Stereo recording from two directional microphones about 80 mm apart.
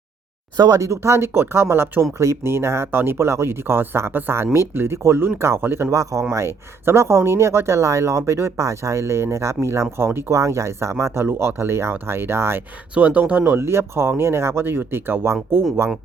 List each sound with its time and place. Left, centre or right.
0.5 s speech: right
5.9 s speech: right
12.9 s speech: centre
13.7 s speech: right